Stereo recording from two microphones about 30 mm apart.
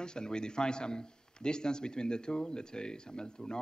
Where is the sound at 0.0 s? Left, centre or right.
Left.